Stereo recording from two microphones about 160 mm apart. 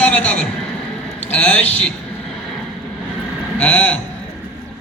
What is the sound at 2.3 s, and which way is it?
Vehicle, centre (ahead or behind).